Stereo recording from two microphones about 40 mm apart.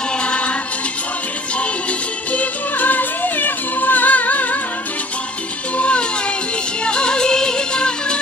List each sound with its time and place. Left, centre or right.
0.2 s music: left
2.3 s music: left
5.8 s music: left